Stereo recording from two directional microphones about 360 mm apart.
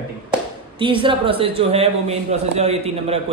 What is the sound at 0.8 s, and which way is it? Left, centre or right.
A man's voice, centre.